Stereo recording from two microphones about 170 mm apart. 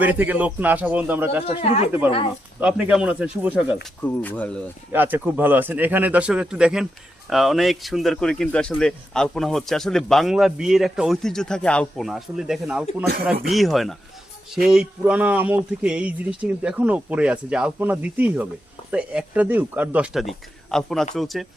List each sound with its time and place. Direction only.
0.0 s speech: 10° right (ahead or behind)
1.5 s speech: 35° left (ahead or behind)
2.6 s speech: 5° right (ahead or behind)
4.0 s speech: 10° left (ahead or behind)
4.9 s a man's voice: 10° right (ahead or behind)